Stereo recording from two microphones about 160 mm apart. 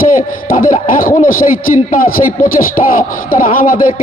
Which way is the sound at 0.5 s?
60° left (ahead or behind).